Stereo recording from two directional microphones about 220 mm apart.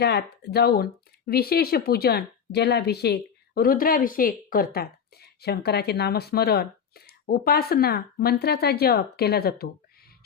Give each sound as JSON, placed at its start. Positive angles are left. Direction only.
{"t": 0.0, "sound": "speech", "side_deg": 50}